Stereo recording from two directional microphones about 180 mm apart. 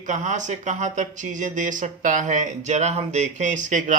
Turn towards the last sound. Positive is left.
turn(degrees=-45)  # may be behind; listen again after turning